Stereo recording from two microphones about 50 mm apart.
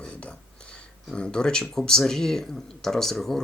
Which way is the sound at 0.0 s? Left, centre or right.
Left.